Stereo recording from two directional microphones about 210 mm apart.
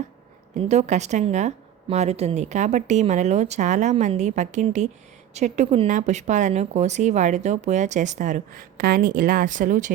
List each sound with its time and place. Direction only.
0.5 s speech: 35° right (ahead or behind)